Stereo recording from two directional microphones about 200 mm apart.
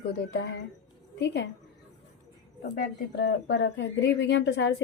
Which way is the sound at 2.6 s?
55° left (ahead or behind).